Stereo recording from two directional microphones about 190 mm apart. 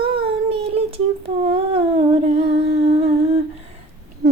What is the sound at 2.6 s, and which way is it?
Humming, 35° right (ahead or behind).